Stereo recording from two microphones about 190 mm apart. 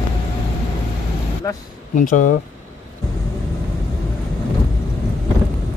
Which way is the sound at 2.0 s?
45° left (ahead or behind).